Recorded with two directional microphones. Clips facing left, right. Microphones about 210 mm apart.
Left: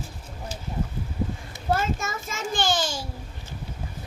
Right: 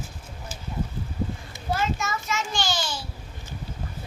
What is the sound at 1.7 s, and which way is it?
A child's voice, 50° left (ahead or behind).